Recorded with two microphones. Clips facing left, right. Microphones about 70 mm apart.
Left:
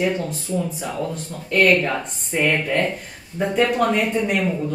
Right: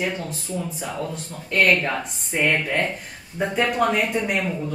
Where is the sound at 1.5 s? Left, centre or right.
Centre.